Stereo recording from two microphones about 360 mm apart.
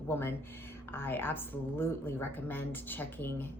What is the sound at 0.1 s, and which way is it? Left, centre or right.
Speech, centre.